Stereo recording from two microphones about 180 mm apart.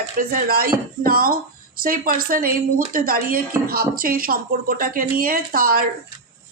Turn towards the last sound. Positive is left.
turn(degrees=-55)  # may be behind; listen again after turning